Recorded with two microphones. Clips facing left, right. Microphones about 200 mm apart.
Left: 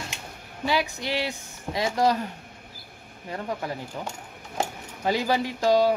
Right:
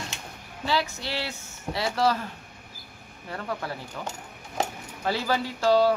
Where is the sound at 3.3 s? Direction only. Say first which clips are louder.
Left 2 dB; 15° left (ahead or behind).